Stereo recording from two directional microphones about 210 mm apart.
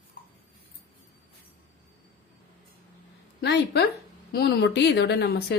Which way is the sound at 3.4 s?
55° left (ahead or behind).